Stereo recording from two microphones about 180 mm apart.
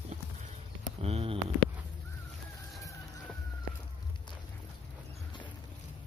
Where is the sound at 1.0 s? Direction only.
35° right (ahead or behind).